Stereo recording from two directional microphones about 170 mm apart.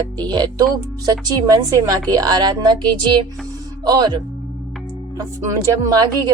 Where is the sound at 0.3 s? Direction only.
25° right (ahead or behind).